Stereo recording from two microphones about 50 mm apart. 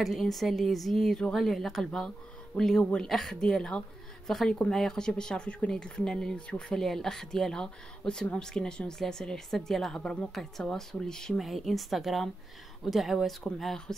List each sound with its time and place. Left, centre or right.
0.0 s a woman's voice: centre; by 6.8 s left
6.8 s a woman's voice: centre
11.3 s a woman's voice: centre
13.4 s a woman's voice: centre